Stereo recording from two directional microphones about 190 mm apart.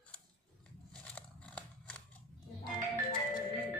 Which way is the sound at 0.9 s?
5° left (ahead or behind).